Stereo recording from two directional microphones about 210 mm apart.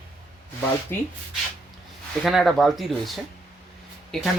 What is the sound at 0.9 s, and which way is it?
Speech, 10° left (ahead or behind).